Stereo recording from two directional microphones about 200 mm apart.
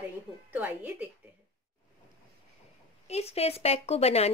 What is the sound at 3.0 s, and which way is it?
A woman's voice, 30° left (ahead or behind).